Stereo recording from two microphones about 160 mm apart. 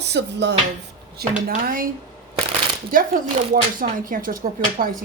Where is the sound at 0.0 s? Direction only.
90° right.